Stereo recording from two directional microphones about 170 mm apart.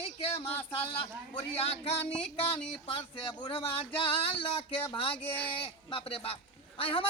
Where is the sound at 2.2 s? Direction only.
5° left (ahead or behind).